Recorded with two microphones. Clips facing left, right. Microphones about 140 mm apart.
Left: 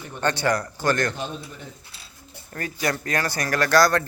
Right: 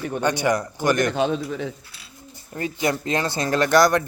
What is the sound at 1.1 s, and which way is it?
Speech, 85° right.